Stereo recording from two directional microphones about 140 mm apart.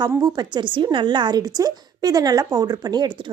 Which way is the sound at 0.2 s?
30° right (ahead or behind).